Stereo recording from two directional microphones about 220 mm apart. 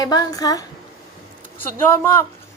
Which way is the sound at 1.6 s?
10° left (ahead or behind).